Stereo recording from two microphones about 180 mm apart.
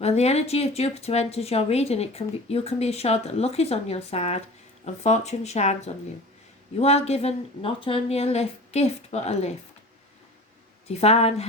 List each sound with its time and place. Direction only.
0.0 s a woman's voice: 35° left (ahead or behind)
10.8 s a woman's voice: 35° left (ahead or behind)